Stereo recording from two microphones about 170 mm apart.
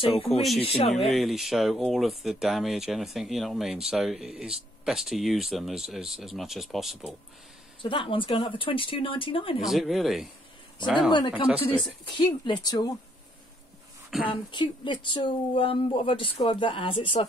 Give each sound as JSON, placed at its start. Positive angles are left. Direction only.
{"t": 0.4, "sound": "speech", "side_deg": 0}
{"t": 7.8, "sound": "speech", "side_deg": 30}
{"t": 9.6, "sound": "speech", "side_deg": 0}
{"t": 11.0, "sound": "speech", "side_deg": 25}
{"t": 14.1, "sound": "a woman's voice", "side_deg": 0}
{"t": 14.5, "sound": "speech", "side_deg": 25}